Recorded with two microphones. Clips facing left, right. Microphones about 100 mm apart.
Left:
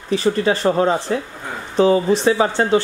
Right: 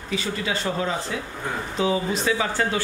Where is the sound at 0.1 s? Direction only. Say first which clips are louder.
Left 10 dB; 35° left (ahead or behind).